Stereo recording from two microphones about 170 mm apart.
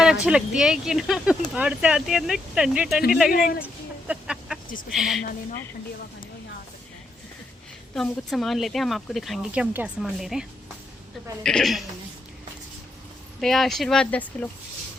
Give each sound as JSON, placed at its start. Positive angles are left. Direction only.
{"t": 0.0, "sound": "speech", "side_deg": -5}
{"t": 3.3, "sound": "speech", "side_deg": 55}
{"t": 4.1, "sound": "a sound", "side_deg": -5}
{"t": 4.9, "sound": "speech", "side_deg": 0}
{"t": 7.9, "sound": "speech", "side_deg": 5}
{"t": 11.4, "sound": "speech", "side_deg": 0}
{"t": 13.4, "sound": "speech", "side_deg": 0}